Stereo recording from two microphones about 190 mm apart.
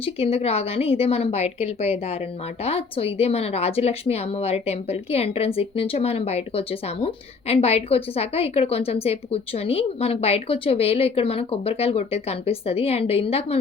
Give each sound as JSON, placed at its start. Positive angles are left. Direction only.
{"t": 0.0, "sound": "speech", "side_deg": 30}